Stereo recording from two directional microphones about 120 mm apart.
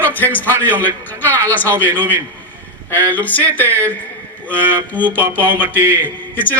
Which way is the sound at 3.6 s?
20° right (ahead or behind).